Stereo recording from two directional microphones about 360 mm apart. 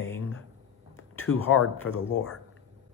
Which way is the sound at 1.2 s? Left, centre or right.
Left.